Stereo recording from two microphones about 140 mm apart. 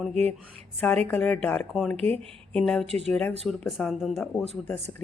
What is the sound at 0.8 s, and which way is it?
Speech, 10° left (ahead or behind).